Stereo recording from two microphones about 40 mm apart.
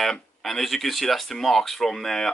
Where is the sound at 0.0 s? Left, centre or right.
Centre.